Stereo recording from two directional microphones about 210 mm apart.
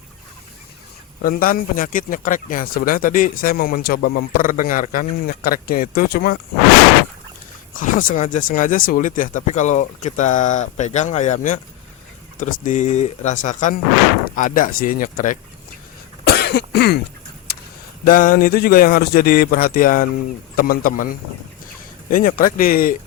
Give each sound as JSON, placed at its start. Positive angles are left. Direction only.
{"t": 1.2, "sound": "speech", "side_deg": 40}
{"t": 7.7, "sound": "a sound", "side_deg": 40}
{"t": 8.2, "sound": "speech", "side_deg": 40}
{"t": 12.6, "sound": "speech", "side_deg": 35}
{"t": 16.2, "sound": "cough", "side_deg": 50}
{"t": 18.0, "sound": "speech", "side_deg": 40}